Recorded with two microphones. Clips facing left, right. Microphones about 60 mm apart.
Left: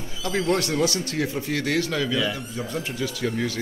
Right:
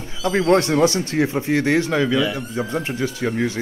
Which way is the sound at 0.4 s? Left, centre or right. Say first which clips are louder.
Right 7 dB; right.